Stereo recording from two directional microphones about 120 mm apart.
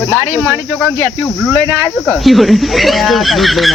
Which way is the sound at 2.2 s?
Centre (ahead or behind).